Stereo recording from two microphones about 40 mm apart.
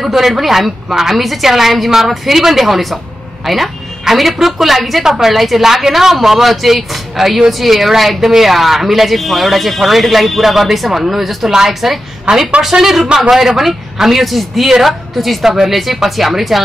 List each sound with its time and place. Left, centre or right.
0.0 s a woman's voice: centre
12.3 s speech: right
12.6 s a woman's voice: centre
15.5 s a woman's voice: centre